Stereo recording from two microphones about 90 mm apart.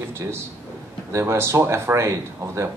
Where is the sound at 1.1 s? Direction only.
30° right (ahead or behind).